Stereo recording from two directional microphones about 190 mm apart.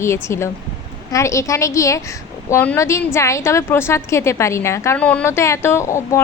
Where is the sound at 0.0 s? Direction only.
15° left (ahead or behind).